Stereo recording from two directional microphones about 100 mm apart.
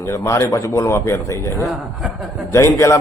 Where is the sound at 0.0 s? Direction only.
30° left (ahead or behind).